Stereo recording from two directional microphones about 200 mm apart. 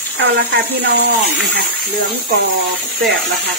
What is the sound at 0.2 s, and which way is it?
Speech, 55° right (ahead or behind).